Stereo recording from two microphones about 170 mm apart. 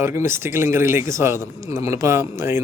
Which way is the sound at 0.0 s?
15° right (ahead or behind).